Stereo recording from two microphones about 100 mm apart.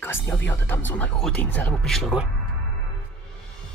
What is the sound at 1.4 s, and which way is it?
Speech, 15° left (ahead or behind).